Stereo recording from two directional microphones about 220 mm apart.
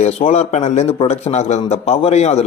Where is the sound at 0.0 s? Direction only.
30° left (ahead or behind).